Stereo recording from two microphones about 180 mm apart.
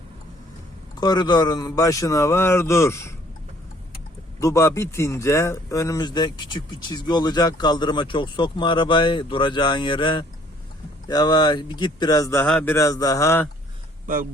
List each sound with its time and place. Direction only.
0.9 s a man's voice: 25° left (ahead or behind)
4.4 s speech: 15° left (ahead or behind)
12.7 s a man's voice: 20° left (ahead or behind)